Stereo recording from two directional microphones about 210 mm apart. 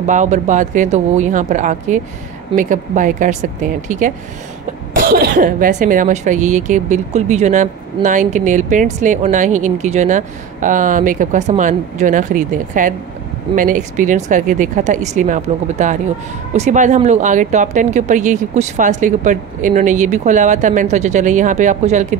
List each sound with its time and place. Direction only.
0.0 s speech: 35° right (ahead or behind)